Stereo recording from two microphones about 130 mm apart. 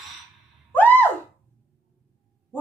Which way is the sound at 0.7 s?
15° left (ahead or behind).